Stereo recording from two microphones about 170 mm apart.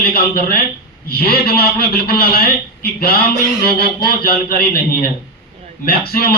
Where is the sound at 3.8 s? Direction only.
65° left (ahead or behind).